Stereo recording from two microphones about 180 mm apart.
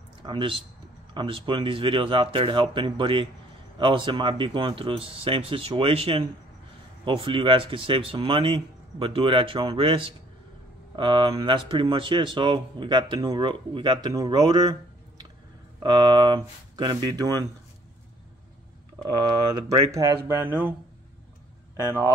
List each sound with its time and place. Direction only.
0.2 s speech: 25° right (ahead or behind)
19.1 s speech: 20° right (ahead or behind)
21.7 s speech: 15° right (ahead or behind)